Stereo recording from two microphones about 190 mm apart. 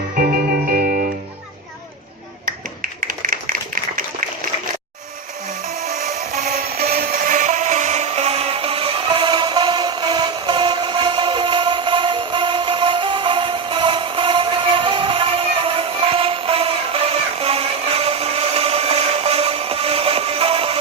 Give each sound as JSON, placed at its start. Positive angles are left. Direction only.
{"t": 0.7, "sound": "music", "side_deg": -50}
{"t": 3.0, "sound": "a sound", "side_deg": -45}
{"t": 5.8, "sound": "music", "side_deg": -35}